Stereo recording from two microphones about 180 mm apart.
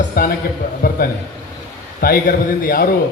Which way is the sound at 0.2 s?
55° left (ahead or behind).